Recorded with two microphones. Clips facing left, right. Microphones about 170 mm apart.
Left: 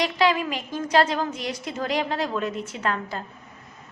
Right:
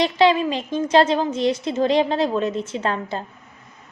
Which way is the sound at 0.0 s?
25° right (ahead or behind).